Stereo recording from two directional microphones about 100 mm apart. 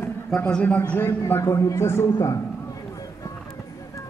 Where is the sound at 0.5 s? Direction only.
15° left (ahead or behind).